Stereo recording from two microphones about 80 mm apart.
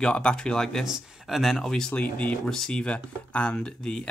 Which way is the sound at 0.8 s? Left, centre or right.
Centre.